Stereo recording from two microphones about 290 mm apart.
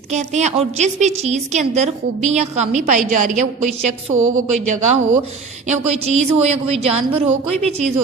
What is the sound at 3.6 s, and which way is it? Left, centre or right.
A woman's voice, right.